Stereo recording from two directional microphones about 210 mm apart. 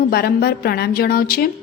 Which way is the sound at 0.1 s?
45° left (ahead or behind).